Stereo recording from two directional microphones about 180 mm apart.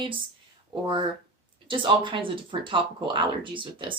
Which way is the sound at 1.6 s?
25° right (ahead or behind).